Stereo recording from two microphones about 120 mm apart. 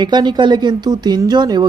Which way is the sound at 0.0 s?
35° right (ahead or behind).